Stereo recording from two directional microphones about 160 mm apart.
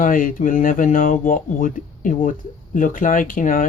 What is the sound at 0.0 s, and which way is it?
Speech, 55° left (ahead or behind).